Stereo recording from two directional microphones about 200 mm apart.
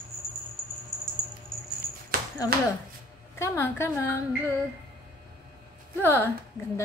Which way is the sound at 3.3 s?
15° left (ahead or behind).